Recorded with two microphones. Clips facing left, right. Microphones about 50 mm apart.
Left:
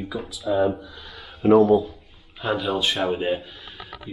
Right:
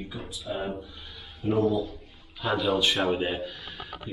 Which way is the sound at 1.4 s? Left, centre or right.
Left.